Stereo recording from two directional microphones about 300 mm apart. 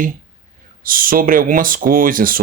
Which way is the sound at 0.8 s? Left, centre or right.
Right.